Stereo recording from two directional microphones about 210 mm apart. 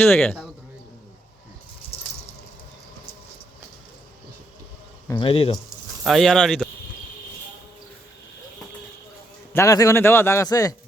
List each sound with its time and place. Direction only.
0.0 s speech: 5° left (ahead or behind)
5.0 s speech: 25° left (ahead or behind)
6.0 s speech: centre (ahead or behind)
9.5 s a man's voice: 15° left (ahead or behind)